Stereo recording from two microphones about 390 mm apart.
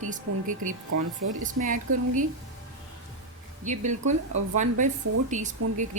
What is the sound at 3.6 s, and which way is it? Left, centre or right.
A woman's voice, centre.